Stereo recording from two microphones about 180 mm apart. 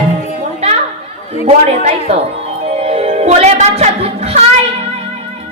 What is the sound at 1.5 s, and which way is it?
Speech, 35° right (ahead or behind).